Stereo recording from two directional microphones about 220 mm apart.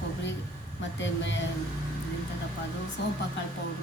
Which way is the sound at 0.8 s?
55° left (ahead or behind).